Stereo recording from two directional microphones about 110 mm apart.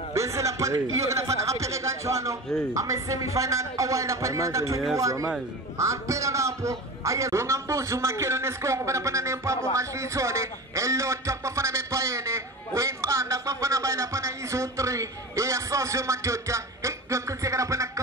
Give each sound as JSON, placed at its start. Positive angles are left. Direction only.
{"t": 0.1, "sound": "a man's voice", "side_deg": -25}